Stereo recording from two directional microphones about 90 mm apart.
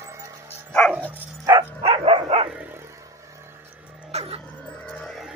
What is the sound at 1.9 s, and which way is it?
Dog, 90° right.